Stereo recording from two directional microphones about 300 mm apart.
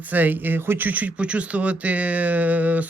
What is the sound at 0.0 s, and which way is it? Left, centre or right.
Speech, centre.